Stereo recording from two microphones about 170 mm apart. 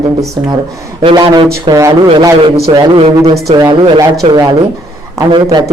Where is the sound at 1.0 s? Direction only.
30° right (ahead or behind).